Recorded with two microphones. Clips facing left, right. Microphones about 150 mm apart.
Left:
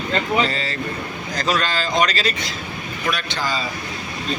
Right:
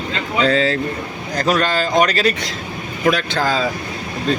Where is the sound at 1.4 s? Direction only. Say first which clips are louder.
Right 5 dB; 55° right (ahead or behind).